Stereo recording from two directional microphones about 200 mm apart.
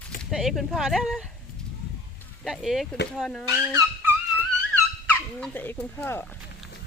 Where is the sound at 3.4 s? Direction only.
15° right (ahead or behind).